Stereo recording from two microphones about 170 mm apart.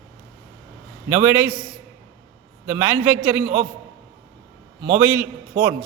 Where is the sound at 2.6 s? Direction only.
10° right (ahead or behind).